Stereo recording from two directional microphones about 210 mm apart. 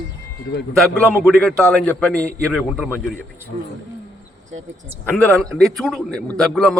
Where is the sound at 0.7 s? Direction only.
5° left (ahead or behind).